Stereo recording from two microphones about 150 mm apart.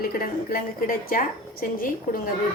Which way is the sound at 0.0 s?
70° left (ahead or behind).